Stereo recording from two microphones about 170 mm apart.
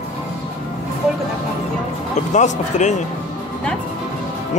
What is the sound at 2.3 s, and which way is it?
Speech, 45° left (ahead or behind).